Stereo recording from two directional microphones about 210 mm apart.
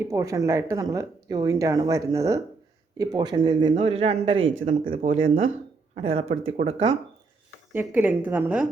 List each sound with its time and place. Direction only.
0.0 s speech: 15° right (ahead or behind)
4.4 s speech: 70° right (ahead or behind)
4.6 s speech: 40° right (ahead or behind)
5.9 s speech: 25° right (ahead or behind)
7.7 s speech: 10° right (ahead or behind)